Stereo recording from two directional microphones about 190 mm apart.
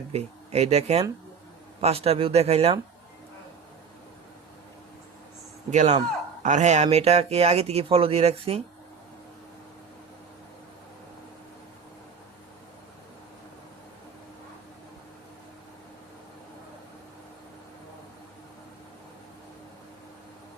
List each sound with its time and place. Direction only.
0.1 s speech: 35° right (ahead or behind)
5.7 s speech: 40° right (ahead or behind)